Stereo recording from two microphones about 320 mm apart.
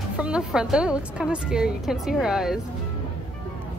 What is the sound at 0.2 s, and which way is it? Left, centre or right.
Speech, centre.